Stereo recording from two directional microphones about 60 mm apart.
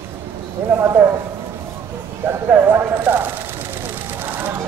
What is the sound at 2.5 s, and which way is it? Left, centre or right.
Speech, right.